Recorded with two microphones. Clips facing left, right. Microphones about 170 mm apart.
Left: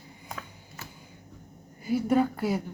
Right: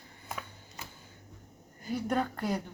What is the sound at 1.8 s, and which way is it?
Speech, 10° left (ahead or behind).